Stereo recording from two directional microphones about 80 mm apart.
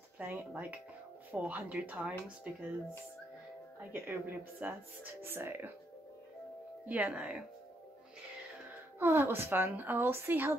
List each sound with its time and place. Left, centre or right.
0.2 s speech: right
3.9 s speech: right
6.9 s speech: centre
8.6 s a woman's voice: right